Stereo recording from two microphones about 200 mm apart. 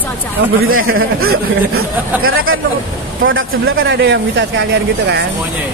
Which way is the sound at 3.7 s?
60° right (ahead or behind).